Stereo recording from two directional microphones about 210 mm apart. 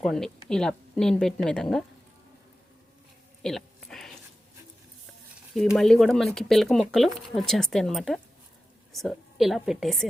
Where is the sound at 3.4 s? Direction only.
Centre (ahead or behind).